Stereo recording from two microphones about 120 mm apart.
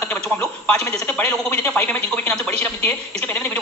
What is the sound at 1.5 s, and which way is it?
A woman's voice, 10° left (ahead or behind).